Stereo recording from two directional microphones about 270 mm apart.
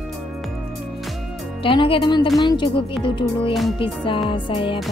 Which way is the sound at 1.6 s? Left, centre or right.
Centre.